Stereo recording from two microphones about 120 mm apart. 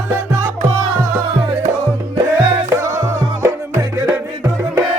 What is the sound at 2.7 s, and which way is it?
Music, 25° right (ahead or behind).